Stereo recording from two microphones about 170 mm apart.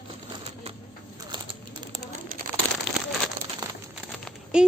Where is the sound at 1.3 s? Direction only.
25° right (ahead or behind).